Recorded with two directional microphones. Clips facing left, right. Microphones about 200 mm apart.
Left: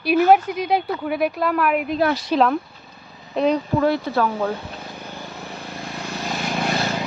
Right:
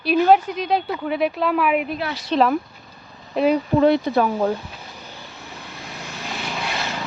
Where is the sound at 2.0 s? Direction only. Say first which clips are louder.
Left 8 dB; 45° left (ahead or behind).